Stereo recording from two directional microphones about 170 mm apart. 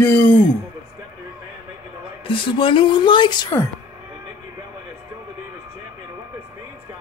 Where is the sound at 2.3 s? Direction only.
30° left (ahead or behind).